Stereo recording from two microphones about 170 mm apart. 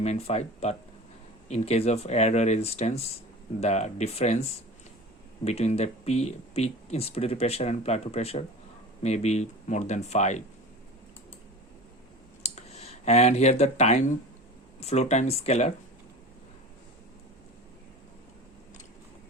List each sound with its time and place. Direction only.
0.0 s speech: 40° left (ahead or behind)
5.5 s speech: 40° left (ahead or behind)
12.4 s a sound: 40° left (ahead or behind)
14.8 s speech: 40° left (ahead or behind)